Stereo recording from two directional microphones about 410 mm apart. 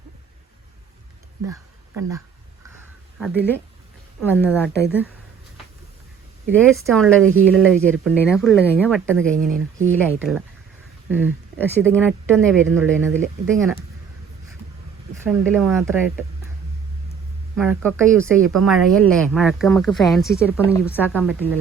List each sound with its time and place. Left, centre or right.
3.2 s speech: centre
6.7 s speech: centre
9.3 s speech: centre
10.2 s speech: centre
15.2 s speech: centre
17.6 s speech: centre